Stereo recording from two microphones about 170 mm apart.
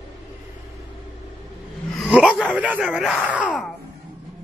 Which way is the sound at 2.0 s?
5° right (ahead or behind).